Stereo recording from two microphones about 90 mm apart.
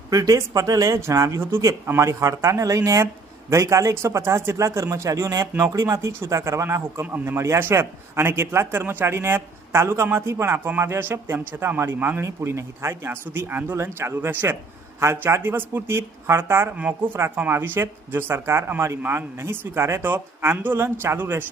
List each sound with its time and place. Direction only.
0.1 s speech: 40° right (ahead or behind)
16.7 s speech: 15° right (ahead or behind)